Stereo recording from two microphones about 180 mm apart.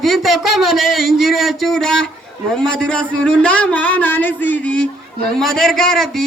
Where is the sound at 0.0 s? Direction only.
Centre (ahead or behind).